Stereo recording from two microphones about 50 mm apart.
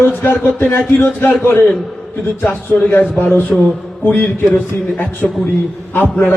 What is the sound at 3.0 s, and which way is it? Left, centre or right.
Speech, left.